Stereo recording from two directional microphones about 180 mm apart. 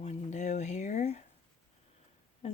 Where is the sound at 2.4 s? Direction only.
35° left (ahead or behind).